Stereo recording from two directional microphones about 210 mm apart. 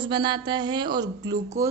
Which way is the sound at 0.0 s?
20° right (ahead or behind).